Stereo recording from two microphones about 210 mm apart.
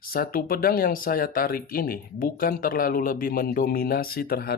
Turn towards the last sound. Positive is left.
turn(degrees=45)  # may be behind; listen again after turning